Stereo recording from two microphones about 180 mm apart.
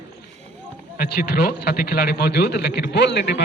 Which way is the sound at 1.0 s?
60° left (ahead or behind).